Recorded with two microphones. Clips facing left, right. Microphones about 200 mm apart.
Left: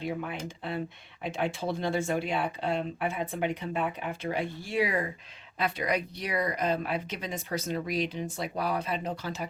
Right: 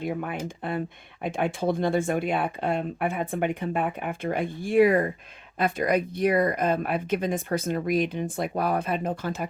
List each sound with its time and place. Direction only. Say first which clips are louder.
0.0 s speech: right 4 dB; 50° right (ahead or behind)